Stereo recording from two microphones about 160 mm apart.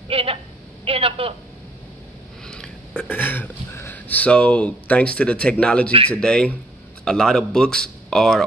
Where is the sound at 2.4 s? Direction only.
5° left (ahead or behind).